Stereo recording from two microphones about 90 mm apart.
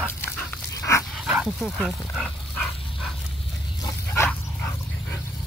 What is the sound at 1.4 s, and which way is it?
Speech, centre (ahead or behind).